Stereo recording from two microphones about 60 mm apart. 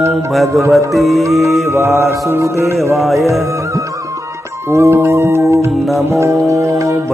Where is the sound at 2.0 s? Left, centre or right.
Right.